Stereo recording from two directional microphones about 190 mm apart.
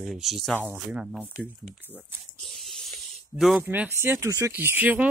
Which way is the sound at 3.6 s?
10° right (ahead or behind).